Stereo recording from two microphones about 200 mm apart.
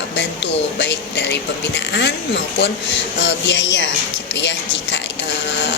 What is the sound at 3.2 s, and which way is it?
A woman's voice, 65° left (ahead or behind).